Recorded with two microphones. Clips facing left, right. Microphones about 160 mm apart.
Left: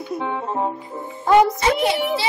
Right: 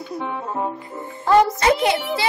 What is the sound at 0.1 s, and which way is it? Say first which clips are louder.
Speech: left 2 dB; 25° left (ahead or behind).